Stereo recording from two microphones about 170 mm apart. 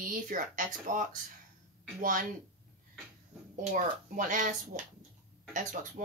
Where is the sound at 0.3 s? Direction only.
50° right (ahead or behind).